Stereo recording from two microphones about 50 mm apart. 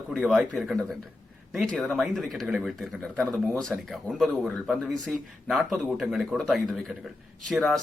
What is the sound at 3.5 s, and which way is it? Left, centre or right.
Speech, centre.